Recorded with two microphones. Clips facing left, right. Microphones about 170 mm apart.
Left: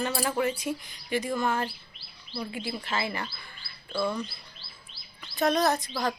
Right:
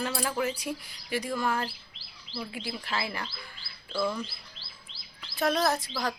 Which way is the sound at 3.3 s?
90° right.